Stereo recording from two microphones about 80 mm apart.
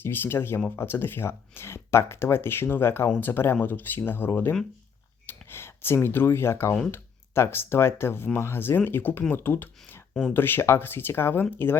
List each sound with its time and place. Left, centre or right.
0.0 s speech: left